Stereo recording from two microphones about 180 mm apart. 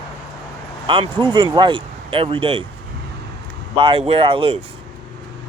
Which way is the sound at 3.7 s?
30° right (ahead or behind).